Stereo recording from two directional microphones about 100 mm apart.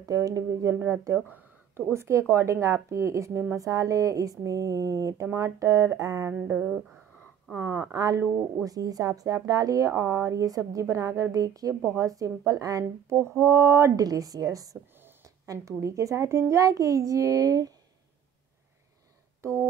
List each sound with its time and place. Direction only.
0.0 s speech: 35° right (ahead or behind)
0.7 s speech: 25° right (ahead or behind)
6.3 s a woman's voice: 20° right (ahead or behind)
7.9 s speech: 35° right (ahead or behind)
19.4 s a sound: 30° right (ahead or behind)